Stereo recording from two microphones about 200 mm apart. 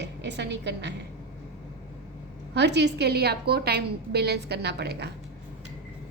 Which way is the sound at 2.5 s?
60° right (ahead or behind).